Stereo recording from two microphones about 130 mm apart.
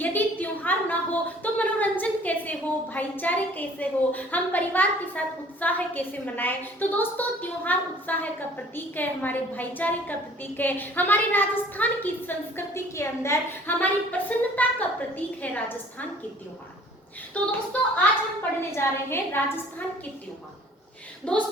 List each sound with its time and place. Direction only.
0.0 s a woman's voice: 15° left (ahead or behind)
17.3 s a woman's voice: 10° left (ahead or behind)
21.3 s a woman's voice: 10° left (ahead or behind)